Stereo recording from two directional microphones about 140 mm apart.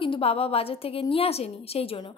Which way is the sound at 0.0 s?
40° left (ahead or behind).